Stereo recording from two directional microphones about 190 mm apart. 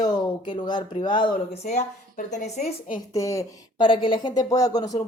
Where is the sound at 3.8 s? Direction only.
25° left (ahead or behind).